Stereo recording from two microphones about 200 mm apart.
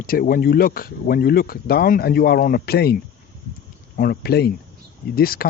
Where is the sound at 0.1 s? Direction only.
45° left (ahead or behind).